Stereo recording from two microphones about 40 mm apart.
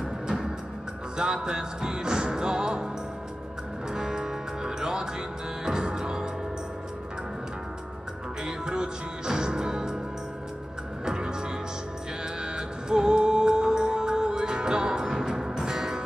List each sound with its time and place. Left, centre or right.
1.1 s music: centre
3.9 s music: centre
8.5 s music: centre
11.1 s music: centre
12.5 s music: centre